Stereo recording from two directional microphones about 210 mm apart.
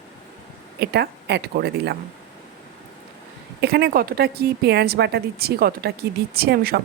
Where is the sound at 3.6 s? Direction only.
50° right (ahead or behind).